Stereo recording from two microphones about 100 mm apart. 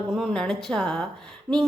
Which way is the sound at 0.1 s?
5° left (ahead or behind).